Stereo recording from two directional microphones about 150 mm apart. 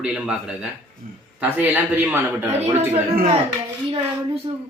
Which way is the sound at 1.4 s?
10° right (ahead or behind).